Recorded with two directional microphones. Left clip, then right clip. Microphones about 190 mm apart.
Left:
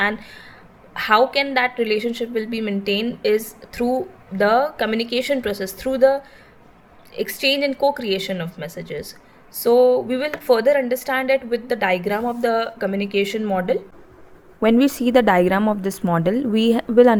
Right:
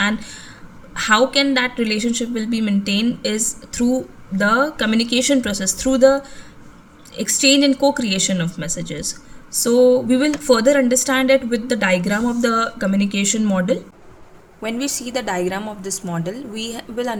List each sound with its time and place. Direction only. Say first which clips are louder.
0.0 s speech: even; 15° right (ahead or behind)
14.6 s a woman's voice: left 7 dB; 35° left (ahead or behind)